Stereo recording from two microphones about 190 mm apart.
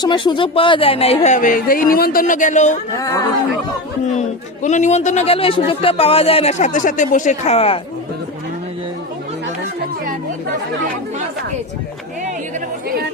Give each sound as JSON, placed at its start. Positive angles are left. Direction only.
{"t": 0.0, "sound": "a man's voice", "side_deg": 25}
{"t": 3.0, "sound": "speech", "side_deg": 20}
{"t": 4.1, "sound": "a man's voice", "side_deg": 40}